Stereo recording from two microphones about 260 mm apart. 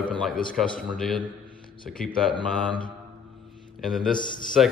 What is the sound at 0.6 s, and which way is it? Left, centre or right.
Speech, centre.